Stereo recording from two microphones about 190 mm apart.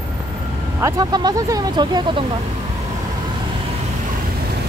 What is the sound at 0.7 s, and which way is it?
Speech, 15° right (ahead or behind).